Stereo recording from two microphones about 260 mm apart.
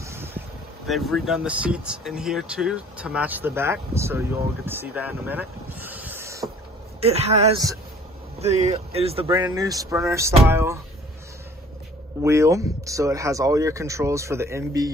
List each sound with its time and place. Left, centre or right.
0.0 s vehicle: centre
0.8 s speech: centre
7.0 s speech: right
12.2 s speech: centre